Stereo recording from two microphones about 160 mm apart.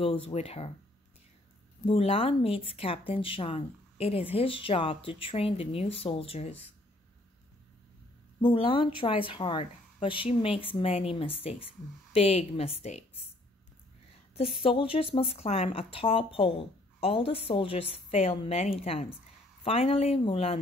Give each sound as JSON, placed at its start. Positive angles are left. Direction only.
{"t": 0.0, "sound": "speech", "side_deg": 35}
{"t": 1.9, "sound": "speech", "side_deg": 35}
{"t": 8.4, "sound": "speech", "side_deg": 35}
{"t": 14.3, "sound": "speech", "side_deg": 35}